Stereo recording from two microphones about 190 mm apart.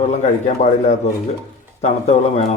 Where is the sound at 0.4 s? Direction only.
35° left (ahead or behind).